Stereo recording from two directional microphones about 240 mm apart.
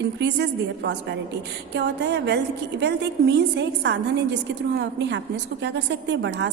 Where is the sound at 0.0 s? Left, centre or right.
Right.